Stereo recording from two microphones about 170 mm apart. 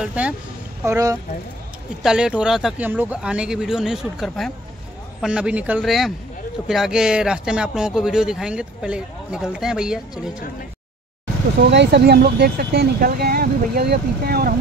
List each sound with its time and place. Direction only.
0.0 s speech: 10° right (ahead or behind)
0.8 s speech: 20° right (ahead or behind)
2.0 s speech: 5° right (ahead or behind)
11.7 s speech: 85° right; by 14.5 s 65° right (ahead or behind)